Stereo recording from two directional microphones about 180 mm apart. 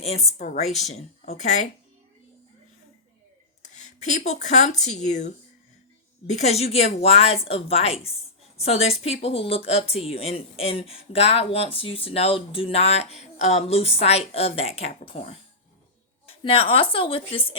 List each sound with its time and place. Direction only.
0.0 s speech: 35° left (ahead or behind)
3.6 s speech: 40° left (ahead or behind)